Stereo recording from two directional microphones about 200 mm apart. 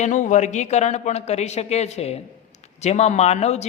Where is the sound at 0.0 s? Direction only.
40° left (ahead or behind).